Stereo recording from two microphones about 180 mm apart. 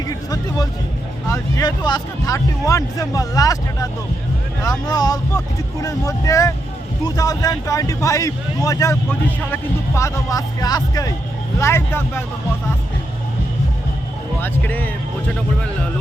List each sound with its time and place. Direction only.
0.1 s speech: 20° left (ahead or behind)
14.4 s speech: 10° left (ahead or behind)